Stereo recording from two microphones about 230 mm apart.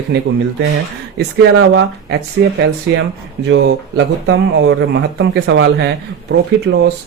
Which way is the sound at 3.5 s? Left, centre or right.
Right.